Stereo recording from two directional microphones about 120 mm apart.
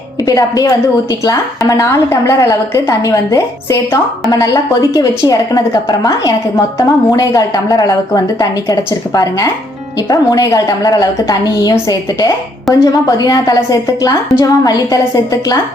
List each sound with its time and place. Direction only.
0.3 s a woman's voice: 30° left (ahead or behind)